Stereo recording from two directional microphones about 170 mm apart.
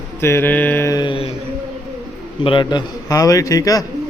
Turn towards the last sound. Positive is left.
turn(degrees=20)  # may be behind; listen again after turning